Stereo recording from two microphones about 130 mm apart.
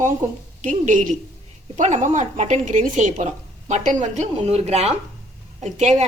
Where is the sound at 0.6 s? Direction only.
80° right.